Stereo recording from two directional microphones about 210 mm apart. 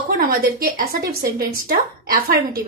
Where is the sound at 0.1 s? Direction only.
45° right (ahead or behind).